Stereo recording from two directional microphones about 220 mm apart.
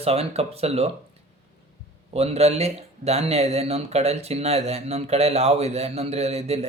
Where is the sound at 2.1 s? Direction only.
30° right (ahead or behind).